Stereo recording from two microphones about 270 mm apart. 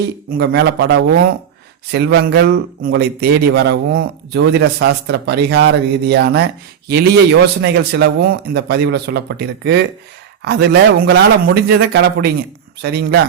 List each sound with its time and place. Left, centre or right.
0.3 s a man's voice: right